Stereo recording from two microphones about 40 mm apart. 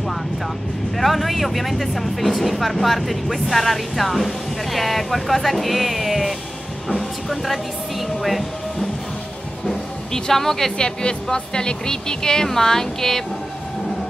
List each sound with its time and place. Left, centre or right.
0.9 s speech: centre
9.7 s speech: centre
10.8 s speech: centre